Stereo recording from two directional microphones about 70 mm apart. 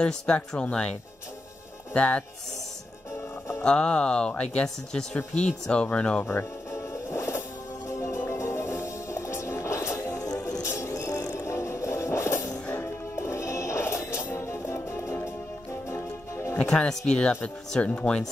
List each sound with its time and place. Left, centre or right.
0.0 s speech: centre
2.0 s speech: centre
3.6 s speech: centre
6.2 s speech: left
6.9 s music: left
10.1 s music: left
10.6 s music: left
16.5 s speech: centre